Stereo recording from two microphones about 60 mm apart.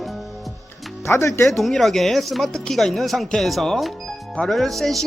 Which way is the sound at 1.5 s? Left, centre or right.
Centre.